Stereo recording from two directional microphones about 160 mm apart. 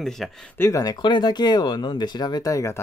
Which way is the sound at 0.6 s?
20° left (ahead or behind).